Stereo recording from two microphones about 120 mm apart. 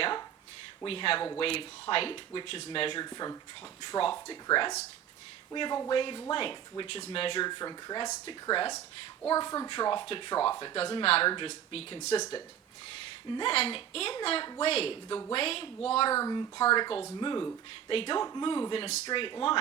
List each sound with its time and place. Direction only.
0.9 s speech: 50° left (ahead or behind)
9.2 s speech: 30° left (ahead or behind)
10.8 s speech: 50° left (ahead or behind)
13.3 s speech: 50° left (ahead or behind)
16.1 s speech: 30° left (ahead or behind); by 19.5 s 45° left (ahead or behind)